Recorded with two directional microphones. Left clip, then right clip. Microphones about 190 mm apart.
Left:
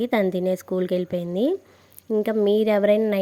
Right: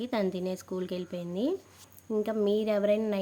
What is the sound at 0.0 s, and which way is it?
A woman's voice, 35° left (ahead or behind).